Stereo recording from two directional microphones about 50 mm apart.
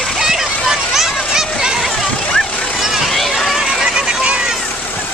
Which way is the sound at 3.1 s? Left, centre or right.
Centre.